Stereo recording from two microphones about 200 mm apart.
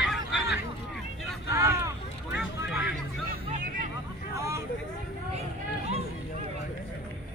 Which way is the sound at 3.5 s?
40° right (ahead or behind).